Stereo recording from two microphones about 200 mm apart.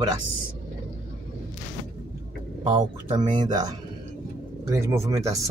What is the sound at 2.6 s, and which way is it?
Speech, 20° right (ahead or behind).